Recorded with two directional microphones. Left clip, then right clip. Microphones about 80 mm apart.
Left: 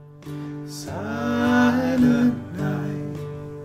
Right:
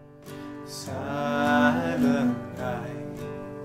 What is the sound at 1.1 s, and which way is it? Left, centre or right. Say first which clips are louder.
Mantra: left 2 dB; right.